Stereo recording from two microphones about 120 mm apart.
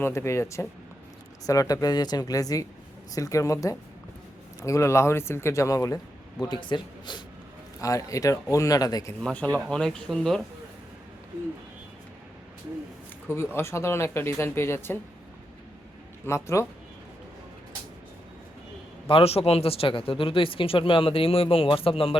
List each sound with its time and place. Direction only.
0.0 s speech: 20° left (ahead or behind)
6.5 s speech: 40° left (ahead or behind)
7.8 s speech: 25° left (ahead or behind)
9.2 s speech: 10° left (ahead or behind)
13.2 s speech: 20° left (ahead or behind)
16.2 s speech: 25° left (ahead or behind)
19.0 s a man's voice: 50° left (ahead or behind)